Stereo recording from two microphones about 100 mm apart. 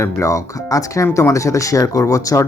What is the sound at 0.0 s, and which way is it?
Speech, 30° left (ahead or behind).